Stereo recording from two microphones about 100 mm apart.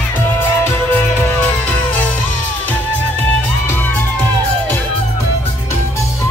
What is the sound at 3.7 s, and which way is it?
Music, 20° left (ahead or behind).